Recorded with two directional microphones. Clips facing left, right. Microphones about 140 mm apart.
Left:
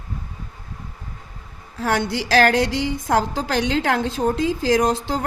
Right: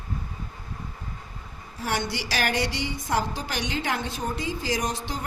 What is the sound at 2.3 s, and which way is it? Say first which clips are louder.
A woman's voice: left 11 dB; 90° left.